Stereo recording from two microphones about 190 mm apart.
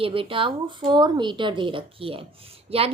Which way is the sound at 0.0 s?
30° right (ahead or behind).